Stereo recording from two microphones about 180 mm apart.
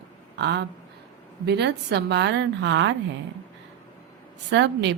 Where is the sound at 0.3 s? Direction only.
70° right (ahead or behind); by 2.9 s 90° right.